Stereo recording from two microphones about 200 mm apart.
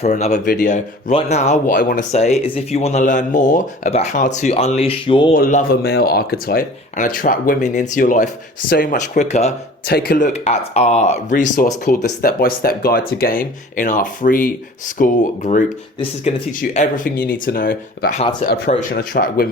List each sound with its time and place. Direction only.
0.0 s speech: 35° left (ahead or behind)
5.3 s speech: 40° left (ahead or behind)
9.8 s speech: 50° left (ahead or behind)